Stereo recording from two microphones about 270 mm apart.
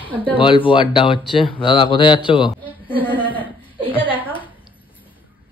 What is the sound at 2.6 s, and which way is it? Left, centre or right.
Speech, centre.